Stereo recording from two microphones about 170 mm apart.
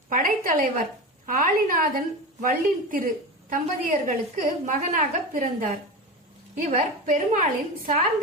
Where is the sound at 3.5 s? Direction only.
50° right (ahead or behind).